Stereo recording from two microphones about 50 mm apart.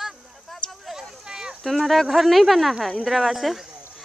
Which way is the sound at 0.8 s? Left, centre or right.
Centre.